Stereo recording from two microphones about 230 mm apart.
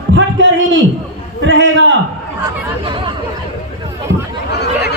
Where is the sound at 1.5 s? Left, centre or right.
Right.